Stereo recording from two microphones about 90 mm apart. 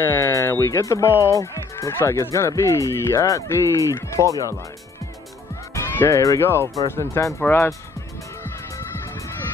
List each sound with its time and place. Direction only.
0.0 s speech: 30° left (ahead or behind)
5.8 s speech: 35° left (ahead or behind)